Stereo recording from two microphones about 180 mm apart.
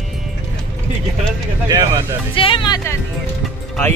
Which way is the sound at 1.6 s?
20° right (ahead or behind).